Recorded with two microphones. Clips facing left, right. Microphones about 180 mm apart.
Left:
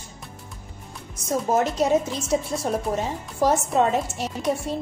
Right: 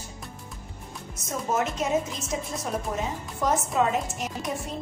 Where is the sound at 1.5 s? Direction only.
35° left (ahead or behind).